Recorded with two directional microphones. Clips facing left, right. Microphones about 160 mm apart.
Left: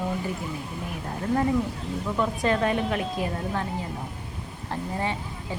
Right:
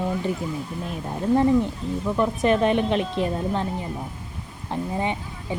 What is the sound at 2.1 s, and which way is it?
A woman's voice, 20° right (ahead or behind).